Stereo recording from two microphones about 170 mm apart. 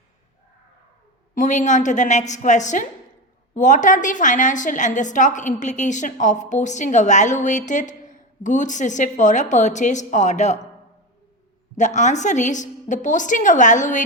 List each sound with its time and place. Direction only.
1.4 s a woman's voice: 45° left (ahead or behind)
11.8 s a woman's voice: 45° left (ahead or behind)